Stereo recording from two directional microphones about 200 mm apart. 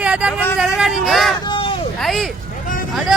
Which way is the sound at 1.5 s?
25° left (ahead or behind).